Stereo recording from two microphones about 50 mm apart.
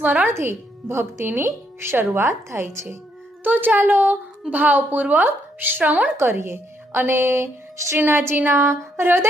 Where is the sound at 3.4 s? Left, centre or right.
Right.